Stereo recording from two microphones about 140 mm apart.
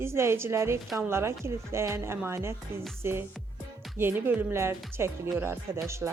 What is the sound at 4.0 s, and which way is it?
A woman's voice, 15° right (ahead or behind).